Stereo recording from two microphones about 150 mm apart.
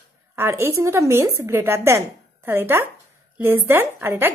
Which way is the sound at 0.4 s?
15° right (ahead or behind).